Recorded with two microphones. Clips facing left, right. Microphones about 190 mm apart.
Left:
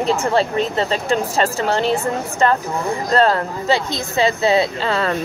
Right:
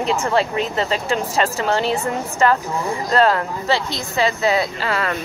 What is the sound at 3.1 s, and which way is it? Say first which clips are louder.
Speech: left 1 dB; 35° left (ahead or behind).